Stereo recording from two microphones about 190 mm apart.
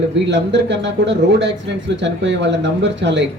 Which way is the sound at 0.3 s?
70° right (ahead or behind).